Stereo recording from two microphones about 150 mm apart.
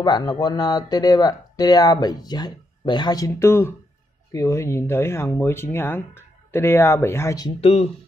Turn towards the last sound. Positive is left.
turn(degrees=45)  # may be behind; listen again after turning